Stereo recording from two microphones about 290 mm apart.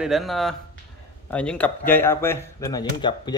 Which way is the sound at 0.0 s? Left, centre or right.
Centre.